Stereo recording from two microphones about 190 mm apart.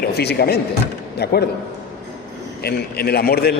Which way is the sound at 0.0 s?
55° left (ahead or behind).